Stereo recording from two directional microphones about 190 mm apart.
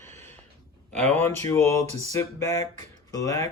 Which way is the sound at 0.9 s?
10° left (ahead or behind).